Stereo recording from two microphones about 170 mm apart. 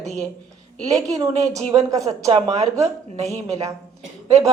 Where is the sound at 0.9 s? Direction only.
20° right (ahead or behind).